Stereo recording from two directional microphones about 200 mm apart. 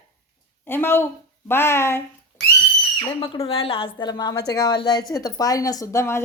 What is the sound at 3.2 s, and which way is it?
A woman's voice, 30° left (ahead or behind).